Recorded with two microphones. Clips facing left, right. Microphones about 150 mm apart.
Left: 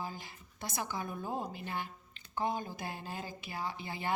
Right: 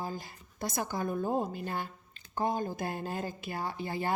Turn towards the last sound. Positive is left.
turn(degrees=-45)  # may be behind; listen again after turning